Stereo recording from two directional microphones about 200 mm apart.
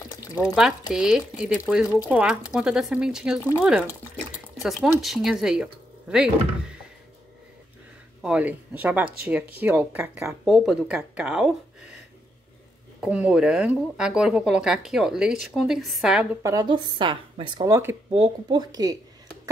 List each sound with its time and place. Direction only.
0.6 s speech: 5° right (ahead or behind)
8.2 s speech: 5° right (ahead or behind)
13.0 s speech: 5° right (ahead or behind)
16.4 s speech: 20° right (ahead or behind)